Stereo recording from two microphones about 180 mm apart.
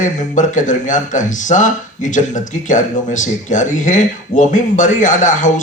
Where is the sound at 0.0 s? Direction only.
45° left (ahead or behind).